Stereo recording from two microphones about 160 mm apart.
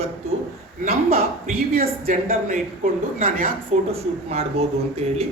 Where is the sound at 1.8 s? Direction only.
65° right (ahead or behind).